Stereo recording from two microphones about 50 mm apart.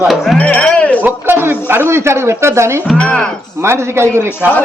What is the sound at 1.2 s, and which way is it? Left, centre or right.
Speech, right.